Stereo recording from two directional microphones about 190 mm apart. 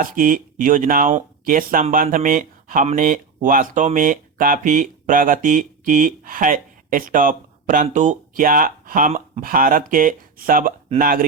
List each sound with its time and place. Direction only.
0.0 s speech: 45° right (ahead or behind)